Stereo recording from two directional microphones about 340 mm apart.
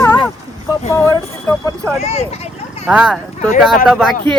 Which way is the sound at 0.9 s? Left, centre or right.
Centre.